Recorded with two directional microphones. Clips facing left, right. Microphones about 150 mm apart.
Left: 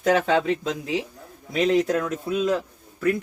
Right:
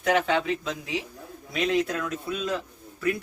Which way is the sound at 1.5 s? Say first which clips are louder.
Left 5 dB; 35° left (ahead or behind).